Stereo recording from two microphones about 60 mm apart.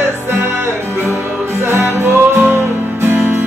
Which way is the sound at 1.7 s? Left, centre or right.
Right.